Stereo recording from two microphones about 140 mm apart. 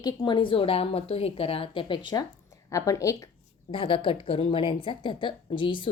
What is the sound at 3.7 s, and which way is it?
A woman's voice, 40° left (ahead or behind).